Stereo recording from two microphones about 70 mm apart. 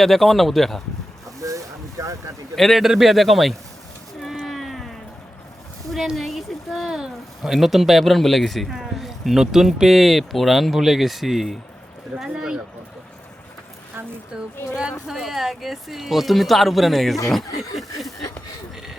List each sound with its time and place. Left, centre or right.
0.0 s speech: centre
1.4 s boat: right
2.6 s speech: centre
4.4 s a sound: centre
5.9 s speech: centre
15.0 s speech: centre
17.6 s snicker: centre